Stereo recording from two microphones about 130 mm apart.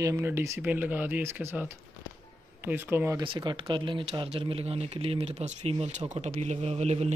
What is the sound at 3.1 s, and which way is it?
Speech, 40° right (ahead or behind).